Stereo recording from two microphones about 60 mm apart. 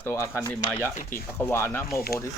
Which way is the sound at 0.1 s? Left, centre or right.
Left.